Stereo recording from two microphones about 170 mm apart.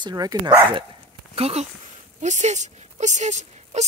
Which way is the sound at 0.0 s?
20° right (ahead or behind).